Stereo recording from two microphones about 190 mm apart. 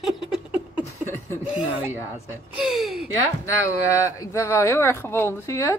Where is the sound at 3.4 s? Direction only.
15° left (ahead or behind).